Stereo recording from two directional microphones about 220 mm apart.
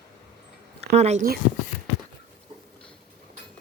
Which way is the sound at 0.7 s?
30° right (ahead or behind).